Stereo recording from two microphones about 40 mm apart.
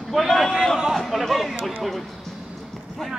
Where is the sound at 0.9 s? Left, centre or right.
Centre.